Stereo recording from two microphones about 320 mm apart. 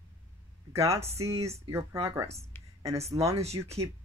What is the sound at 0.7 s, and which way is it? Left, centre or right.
A woman's voice, centre.